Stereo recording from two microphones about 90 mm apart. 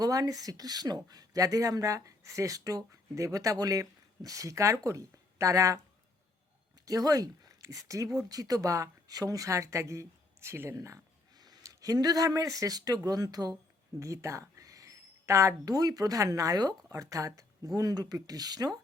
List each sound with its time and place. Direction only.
0.0 s speech: 40° right (ahead or behind)
6.8 s speech: 40° right (ahead or behind)
14.0 s speech: 35° right (ahead or behind)